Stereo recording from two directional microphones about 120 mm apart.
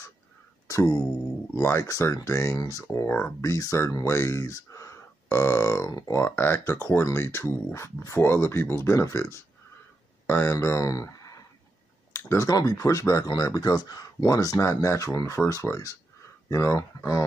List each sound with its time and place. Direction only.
0.7 s speech: 25° left (ahead or behind)